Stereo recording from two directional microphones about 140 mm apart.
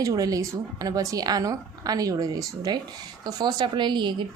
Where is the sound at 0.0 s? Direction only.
25° right (ahead or behind).